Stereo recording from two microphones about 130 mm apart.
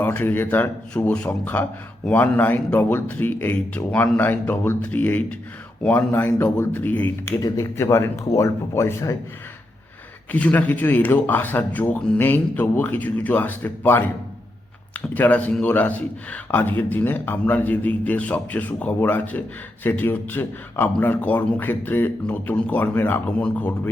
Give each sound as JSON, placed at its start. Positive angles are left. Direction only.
{"t": 0.0, "sound": "a man's voice", "side_deg": 15}
{"t": 10.3, "sound": "a man's voice", "side_deg": 10}
{"t": 15.0, "sound": "a man's voice", "side_deg": 10}